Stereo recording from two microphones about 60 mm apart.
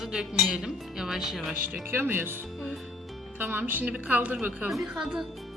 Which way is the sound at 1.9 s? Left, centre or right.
Right.